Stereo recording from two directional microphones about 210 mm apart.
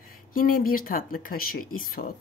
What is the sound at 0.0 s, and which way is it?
Speech, 40° left (ahead or behind).